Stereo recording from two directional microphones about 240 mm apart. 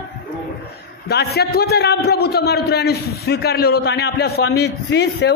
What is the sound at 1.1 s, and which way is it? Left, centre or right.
A man's voice, left.